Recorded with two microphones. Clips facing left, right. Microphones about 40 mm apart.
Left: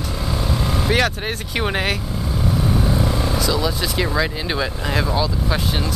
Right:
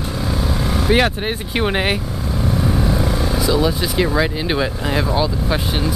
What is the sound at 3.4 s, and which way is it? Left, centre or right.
Speech, right.